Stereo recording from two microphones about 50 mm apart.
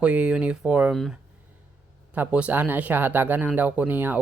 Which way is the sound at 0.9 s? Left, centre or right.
Centre.